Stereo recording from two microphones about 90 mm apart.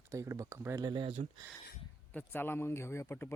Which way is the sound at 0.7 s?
55° right (ahead or behind).